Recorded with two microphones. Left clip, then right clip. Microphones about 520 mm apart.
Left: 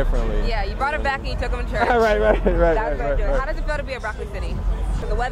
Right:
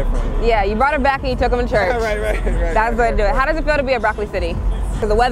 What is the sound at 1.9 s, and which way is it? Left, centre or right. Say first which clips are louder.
Speech: left 3 dB; left.